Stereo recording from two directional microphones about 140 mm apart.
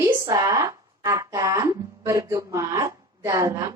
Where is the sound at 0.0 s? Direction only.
25° right (ahead or behind).